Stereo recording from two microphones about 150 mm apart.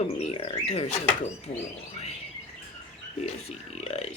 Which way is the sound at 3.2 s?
45° left (ahead or behind).